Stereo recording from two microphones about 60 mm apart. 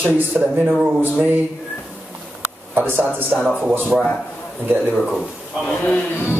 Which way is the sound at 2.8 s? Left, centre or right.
Right.